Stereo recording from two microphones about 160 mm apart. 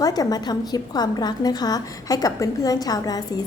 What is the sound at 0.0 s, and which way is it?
A woman's voice, 25° left (ahead or behind).